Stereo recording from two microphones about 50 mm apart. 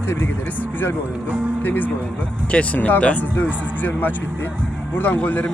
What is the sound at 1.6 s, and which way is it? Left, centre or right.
Speech, left.